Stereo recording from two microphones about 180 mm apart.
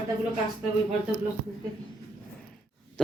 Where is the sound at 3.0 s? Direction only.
5° left (ahead or behind).